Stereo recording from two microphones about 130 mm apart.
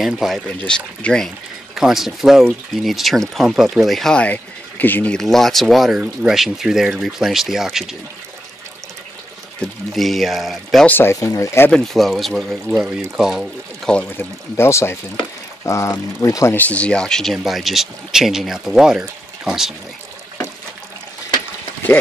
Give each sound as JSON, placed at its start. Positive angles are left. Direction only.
{"t": 0.0, "sound": "speech", "side_deg": 0}
{"t": 5.1, "sound": "speech", "side_deg": 0}
{"t": 9.6, "sound": "speech", "side_deg": 0}
{"t": 10.9, "sound": "speech", "side_deg": 20}
{"t": 11.7, "sound": "speech", "side_deg": 0}
{"t": 13.9, "sound": "speech", "side_deg": 20}
{"t": 16.5, "sound": "speech", "side_deg": 10}